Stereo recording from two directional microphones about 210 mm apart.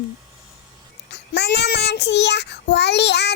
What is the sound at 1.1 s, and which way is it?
Child singing, 55° left (ahead or behind).